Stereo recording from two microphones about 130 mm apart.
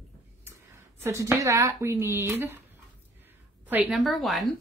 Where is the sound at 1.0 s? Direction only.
25° right (ahead or behind).